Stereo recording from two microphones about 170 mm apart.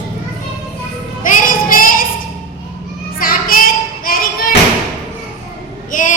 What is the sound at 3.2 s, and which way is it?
Child singing, 60° left (ahead or behind).